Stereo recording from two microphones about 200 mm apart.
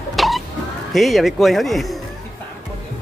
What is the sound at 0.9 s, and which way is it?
Speech, centre (ahead or behind).